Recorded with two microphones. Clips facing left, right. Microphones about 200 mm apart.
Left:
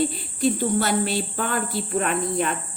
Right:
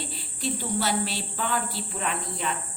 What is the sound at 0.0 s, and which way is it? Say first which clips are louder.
A woman's voice: left 11 dB; 50° left (ahead or behind).